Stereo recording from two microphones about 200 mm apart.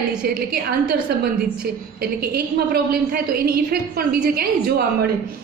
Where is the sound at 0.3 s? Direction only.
45° right (ahead or behind).